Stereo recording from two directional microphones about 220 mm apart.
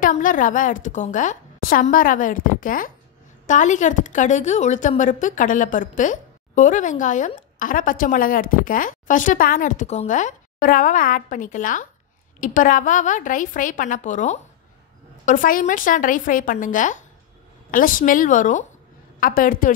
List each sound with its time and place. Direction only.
0.0 s a woman's voice: 35° left (ahead or behind)